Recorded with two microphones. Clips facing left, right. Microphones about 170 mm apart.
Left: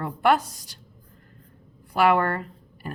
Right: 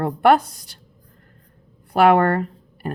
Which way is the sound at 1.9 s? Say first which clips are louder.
Right 6 dB; 60° right (ahead or behind).